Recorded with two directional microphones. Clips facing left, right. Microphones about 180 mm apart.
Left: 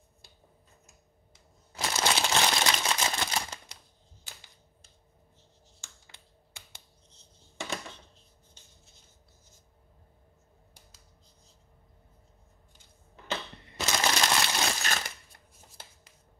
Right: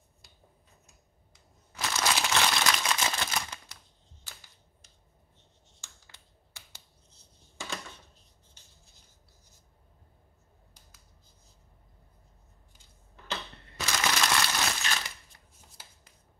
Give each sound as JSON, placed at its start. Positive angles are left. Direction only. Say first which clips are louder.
{"t": 1.7, "sound": "crumpling", "louder": "left 1 dB", "side_deg": 30}
{"t": 13.7, "sound": "crumpling", "louder": "left 2 dB", "side_deg": 25}
{"t": 14.8, "sound": "a sound", "louder": "left 1 dB", "side_deg": 45}